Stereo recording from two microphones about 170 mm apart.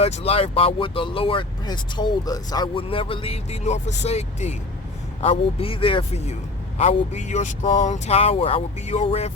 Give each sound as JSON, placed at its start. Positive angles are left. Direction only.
{"t": 0.0, "sound": "speech", "side_deg": 35}